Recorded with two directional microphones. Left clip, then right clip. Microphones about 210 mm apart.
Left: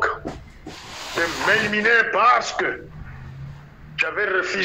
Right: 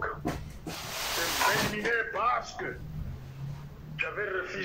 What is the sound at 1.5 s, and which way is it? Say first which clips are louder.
A man's voice: left 13 dB; 40° left (ahead or behind).